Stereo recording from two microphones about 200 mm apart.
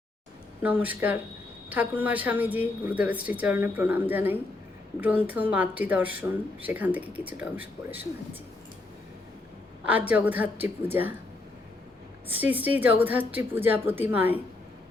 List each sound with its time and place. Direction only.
0.6 s speech: 10° right (ahead or behind)
9.8 s speech: 5° right (ahead or behind)
12.3 s speech: 10° right (ahead or behind)